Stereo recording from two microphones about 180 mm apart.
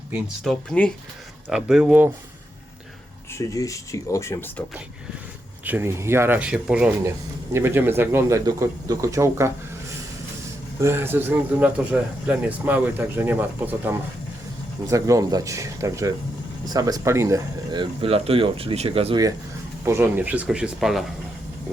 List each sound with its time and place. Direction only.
0.5 s speech: 5° left (ahead or behind)
3.3 s speech: 20° left (ahead or behind)
5.6 s speech: 10° right (ahead or behind)
10.8 s speech: 15° right (ahead or behind); by 19.2 s 30° right (ahead or behind)
19.8 s speech: 15° right (ahead or behind)